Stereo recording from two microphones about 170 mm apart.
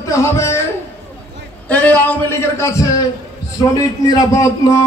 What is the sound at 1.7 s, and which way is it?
A man's voice, 10° left (ahead or behind).